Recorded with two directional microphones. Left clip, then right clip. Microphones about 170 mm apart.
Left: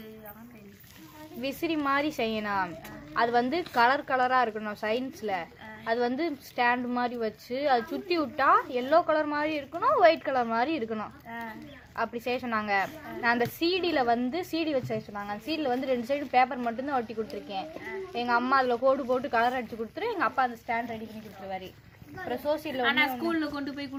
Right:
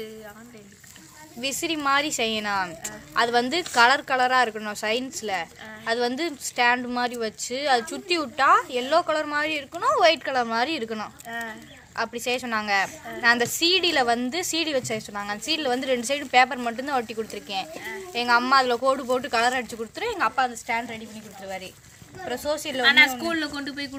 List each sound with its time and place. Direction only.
1.4 s speech: 10° right (ahead or behind)
11.3 s a sound: 65° right (ahead or behind)
11.9 s speech: 10° right (ahead or behind)
22.8 s speech: 50° right (ahead or behind)